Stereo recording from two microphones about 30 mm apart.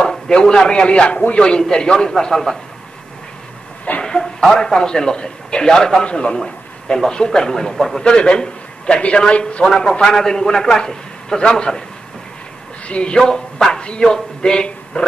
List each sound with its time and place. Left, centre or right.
0.3 s a man's voice: left
3.9 s chicken: left
4.2 s a man's voice: centre
6.0 s a man's voice: left
6.4 s a man's voice: left
8.0 s a man's voice: left
10.0 s a man's voice: centre
12.8 s speech: left
13.2 s a man's voice: centre